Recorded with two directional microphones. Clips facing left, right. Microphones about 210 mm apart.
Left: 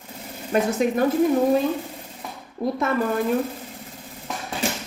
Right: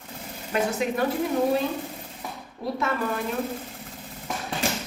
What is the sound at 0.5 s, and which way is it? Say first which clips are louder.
Speech: left 5 dB; 45° left (ahead or behind).